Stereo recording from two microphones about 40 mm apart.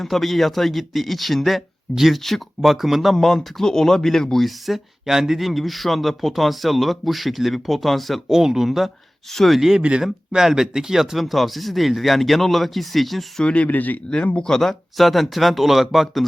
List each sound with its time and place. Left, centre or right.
0.0 s speech: centre
8.3 s speech: centre
9.3 s speech: centre
9.6 s speech: centre
13.4 s speech: left
13.7 s speech: left
14.3 s speech: centre
14.9 s speech: centre